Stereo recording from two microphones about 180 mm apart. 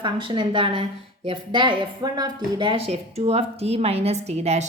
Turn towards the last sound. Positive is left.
turn(degrees=-35)  # may be behind; listen again after turning